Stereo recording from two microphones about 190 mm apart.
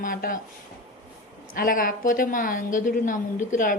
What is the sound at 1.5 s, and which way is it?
A woman's voice, 50° left (ahead or behind).